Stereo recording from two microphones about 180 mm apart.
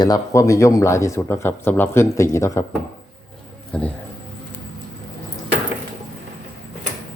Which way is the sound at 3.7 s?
5° left (ahead or behind).